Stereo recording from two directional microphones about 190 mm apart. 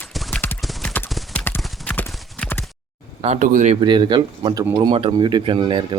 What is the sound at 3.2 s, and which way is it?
Speech, 40° right (ahead or behind).